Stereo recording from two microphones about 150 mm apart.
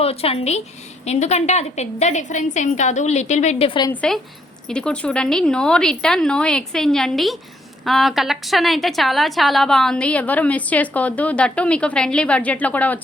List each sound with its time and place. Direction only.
0.0 s a woman's voice: 40° left (ahead or behind)
4.7 s a woman's voice: 5° left (ahead or behind)